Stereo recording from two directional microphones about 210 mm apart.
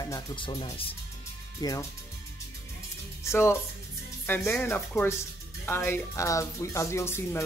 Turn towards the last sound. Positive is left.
turn(degrees=10)  # may be behind; listen again after turning